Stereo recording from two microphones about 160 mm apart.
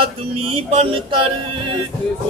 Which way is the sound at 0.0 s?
35° right (ahead or behind).